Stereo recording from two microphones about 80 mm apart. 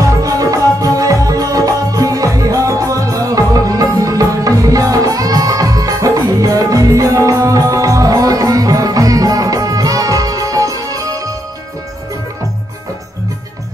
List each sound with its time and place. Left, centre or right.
0.0 s music: right